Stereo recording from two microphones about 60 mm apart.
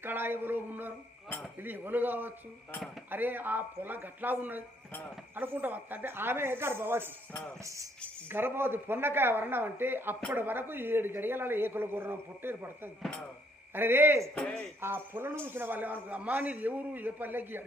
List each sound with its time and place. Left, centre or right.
0.0 s a man's voice: right
7.6 s music: right
8.3 s a man's voice: right
14.3 s speech: centre
14.8 s a man's voice: right